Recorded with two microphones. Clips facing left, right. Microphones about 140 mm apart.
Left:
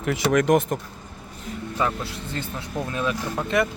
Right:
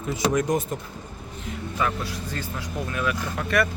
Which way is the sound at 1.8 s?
25° left (ahead or behind).